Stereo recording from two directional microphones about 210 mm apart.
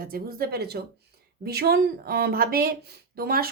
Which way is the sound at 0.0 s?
45° right (ahead or behind).